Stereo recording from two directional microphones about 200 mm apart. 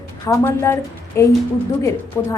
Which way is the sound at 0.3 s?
15° left (ahead or behind).